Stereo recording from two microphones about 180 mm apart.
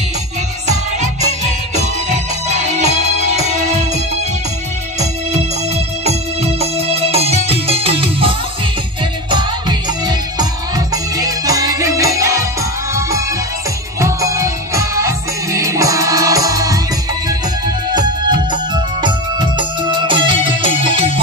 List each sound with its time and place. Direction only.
0.7 s music: 40° right (ahead or behind)
6.0 s music: 35° right (ahead or behind); by 12.4 s 15° right (ahead or behind)
13.9 s music: 15° right (ahead or behind)
17.9 s music: 25° right (ahead or behind)